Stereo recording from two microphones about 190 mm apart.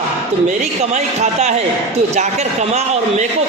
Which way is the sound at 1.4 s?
35° right (ahead or behind).